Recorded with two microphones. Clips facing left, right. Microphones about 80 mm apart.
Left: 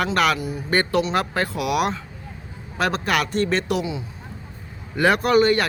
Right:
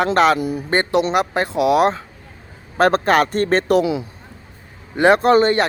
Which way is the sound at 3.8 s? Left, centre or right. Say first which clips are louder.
Right 8 dB; right.